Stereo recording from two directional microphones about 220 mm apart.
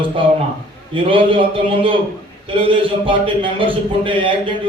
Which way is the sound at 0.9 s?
25° right (ahead or behind).